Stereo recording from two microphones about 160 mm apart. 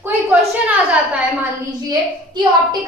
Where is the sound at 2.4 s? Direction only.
30° right (ahead or behind).